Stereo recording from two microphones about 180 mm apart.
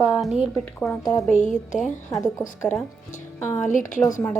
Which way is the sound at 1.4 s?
45° left (ahead or behind).